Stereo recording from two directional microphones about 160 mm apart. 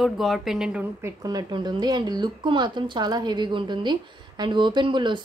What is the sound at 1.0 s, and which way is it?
Speech, 25° right (ahead or behind).